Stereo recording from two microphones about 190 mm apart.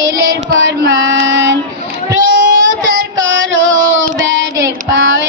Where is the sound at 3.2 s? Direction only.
80° right.